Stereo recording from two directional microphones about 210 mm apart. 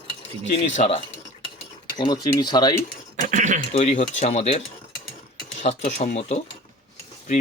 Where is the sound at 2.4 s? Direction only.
20° left (ahead or behind).